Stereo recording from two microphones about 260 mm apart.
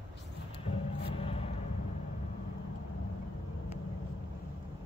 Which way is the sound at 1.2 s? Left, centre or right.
Left.